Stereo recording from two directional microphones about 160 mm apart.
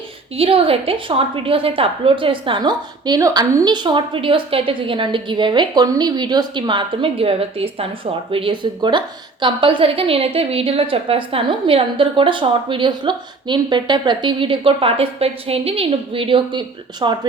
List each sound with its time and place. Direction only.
0.3 s a woman's voice: 35° right (ahead or behind)